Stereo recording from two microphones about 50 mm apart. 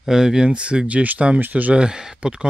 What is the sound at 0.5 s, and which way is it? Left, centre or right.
Speech, right.